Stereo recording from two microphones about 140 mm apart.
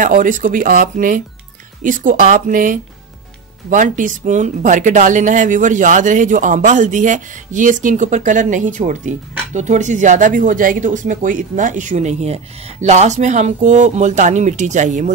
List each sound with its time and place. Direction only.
0.0 s speech: 70° right (ahead or behind)